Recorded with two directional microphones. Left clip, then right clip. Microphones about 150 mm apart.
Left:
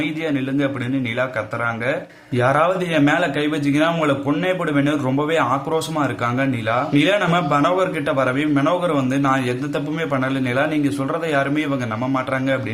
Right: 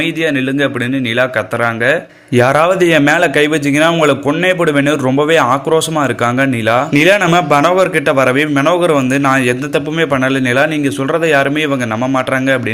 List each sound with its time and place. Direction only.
1.2 s speech: 35° right (ahead or behind)